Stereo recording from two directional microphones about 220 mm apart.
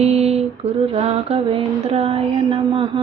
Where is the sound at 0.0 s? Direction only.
30° right (ahead or behind).